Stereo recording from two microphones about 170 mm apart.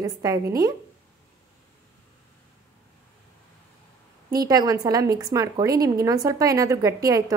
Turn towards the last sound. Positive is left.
turn(degrees=-20)  # may be behind; listen again after turning